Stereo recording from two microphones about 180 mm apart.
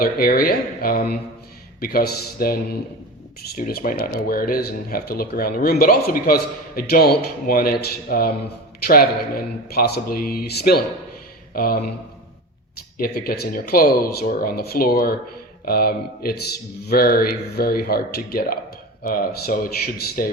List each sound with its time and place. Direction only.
0.0 s speech: 55° left (ahead or behind)
13.0 s speech: 55° left (ahead or behind)